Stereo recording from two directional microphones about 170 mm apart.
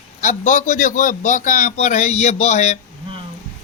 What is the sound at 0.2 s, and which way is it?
A man's voice, 45° left (ahead or behind).